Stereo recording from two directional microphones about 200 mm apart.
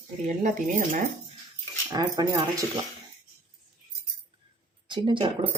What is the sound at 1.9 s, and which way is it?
Speech, 20° right (ahead or behind).